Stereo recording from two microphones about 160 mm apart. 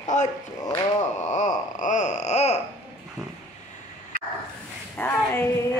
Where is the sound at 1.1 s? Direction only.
50° left (ahead or behind).